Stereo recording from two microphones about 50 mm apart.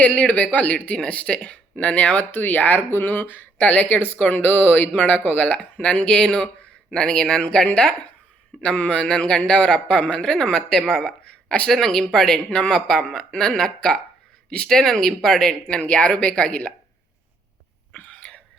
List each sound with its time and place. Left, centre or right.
0.0 s a man's voice: left
3.6 s a man's voice: left
11.7 s a man's voice: centre; by 16.7 s left
18.1 s a sound: left